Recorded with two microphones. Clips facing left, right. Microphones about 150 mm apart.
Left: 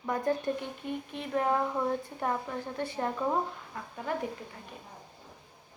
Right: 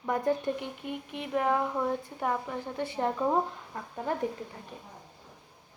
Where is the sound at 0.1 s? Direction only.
20° right (ahead or behind).